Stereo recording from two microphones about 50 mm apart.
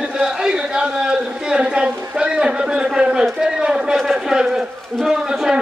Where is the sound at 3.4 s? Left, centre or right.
Centre.